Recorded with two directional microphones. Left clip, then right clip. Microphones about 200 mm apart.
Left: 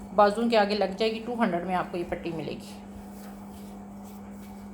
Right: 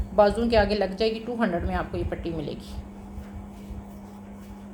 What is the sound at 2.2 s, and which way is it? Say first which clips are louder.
Speech: right 2 dB; 15° left (ahead or behind).